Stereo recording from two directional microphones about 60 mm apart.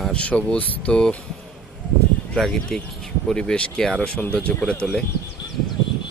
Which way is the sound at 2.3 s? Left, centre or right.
Centre.